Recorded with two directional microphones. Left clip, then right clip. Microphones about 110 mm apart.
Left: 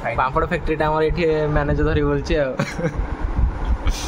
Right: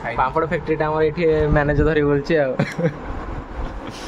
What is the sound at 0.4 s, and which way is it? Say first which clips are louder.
Speech: even; centre (ahead or behind).